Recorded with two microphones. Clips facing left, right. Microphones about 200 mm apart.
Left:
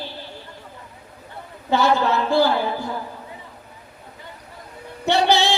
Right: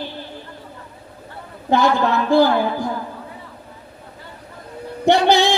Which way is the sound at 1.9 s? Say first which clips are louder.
Right 3 dB; 15° right (ahead or behind).